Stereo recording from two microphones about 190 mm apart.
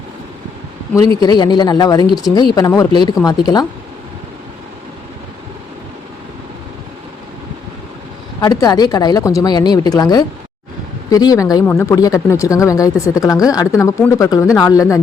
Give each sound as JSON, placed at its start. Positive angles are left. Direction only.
{"t": 1.2, "sound": "speech", "side_deg": 20}
{"t": 8.4, "sound": "speech", "side_deg": 20}